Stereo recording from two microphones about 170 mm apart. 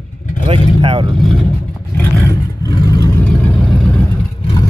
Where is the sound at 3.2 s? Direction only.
10° left (ahead or behind).